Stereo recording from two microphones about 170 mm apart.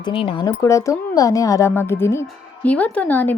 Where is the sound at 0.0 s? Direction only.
30° left (ahead or behind).